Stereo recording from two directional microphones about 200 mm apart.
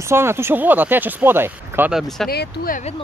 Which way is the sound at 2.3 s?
50° left (ahead or behind).